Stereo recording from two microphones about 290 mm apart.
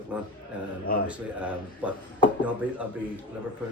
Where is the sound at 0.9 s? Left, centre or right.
Left.